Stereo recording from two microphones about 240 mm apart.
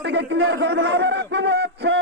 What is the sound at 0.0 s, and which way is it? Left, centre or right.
A man's voice, right.